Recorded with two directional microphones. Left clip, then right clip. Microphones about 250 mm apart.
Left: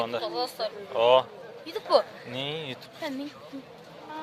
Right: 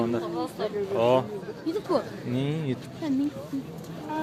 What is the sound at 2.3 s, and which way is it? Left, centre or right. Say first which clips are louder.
Speech: right 3 dB; centre.